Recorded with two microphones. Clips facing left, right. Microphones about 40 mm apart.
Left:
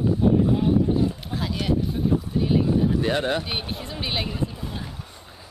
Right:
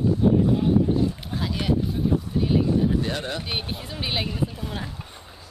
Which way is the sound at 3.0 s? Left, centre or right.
Left.